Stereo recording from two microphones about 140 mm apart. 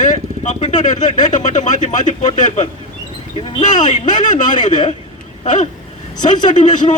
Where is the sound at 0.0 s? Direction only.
60° left (ahead or behind).